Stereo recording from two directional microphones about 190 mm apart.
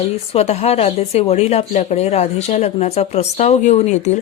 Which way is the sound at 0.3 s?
35° left (ahead or behind).